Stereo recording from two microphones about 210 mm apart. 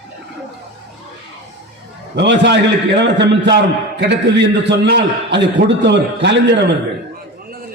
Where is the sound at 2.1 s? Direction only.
55° right (ahead or behind).